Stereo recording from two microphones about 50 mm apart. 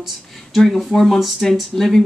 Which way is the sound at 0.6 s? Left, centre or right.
Centre.